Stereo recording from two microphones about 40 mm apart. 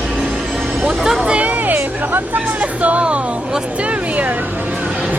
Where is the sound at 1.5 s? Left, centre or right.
Right.